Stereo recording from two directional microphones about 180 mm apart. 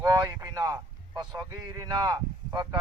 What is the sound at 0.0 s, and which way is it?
Speech, 20° right (ahead or behind).